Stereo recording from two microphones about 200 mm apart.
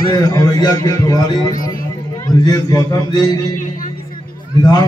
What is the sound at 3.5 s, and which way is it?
Music, 40° left (ahead or behind).